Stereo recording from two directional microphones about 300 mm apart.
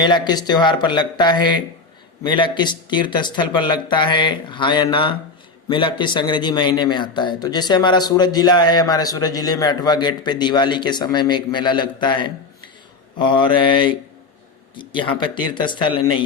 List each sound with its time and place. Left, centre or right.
0.0 s speech: centre